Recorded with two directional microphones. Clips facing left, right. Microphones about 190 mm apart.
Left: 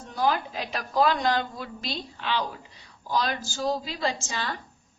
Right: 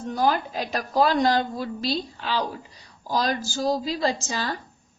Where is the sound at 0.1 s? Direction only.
40° right (ahead or behind).